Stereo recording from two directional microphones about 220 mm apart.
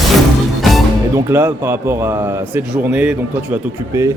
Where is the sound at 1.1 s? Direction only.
10° right (ahead or behind).